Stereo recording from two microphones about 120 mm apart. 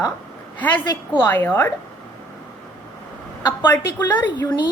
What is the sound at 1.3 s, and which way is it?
Speech, 15° left (ahead or behind).